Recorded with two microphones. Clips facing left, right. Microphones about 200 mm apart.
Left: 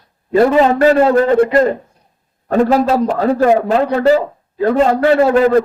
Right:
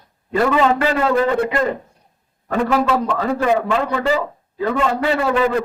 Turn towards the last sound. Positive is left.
turn(degrees=40)  # may be behind; listen again after turning